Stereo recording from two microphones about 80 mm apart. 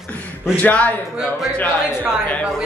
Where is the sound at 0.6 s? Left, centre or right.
Centre.